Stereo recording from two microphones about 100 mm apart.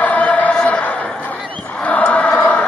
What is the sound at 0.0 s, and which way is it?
Choir, 15° left (ahead or behind).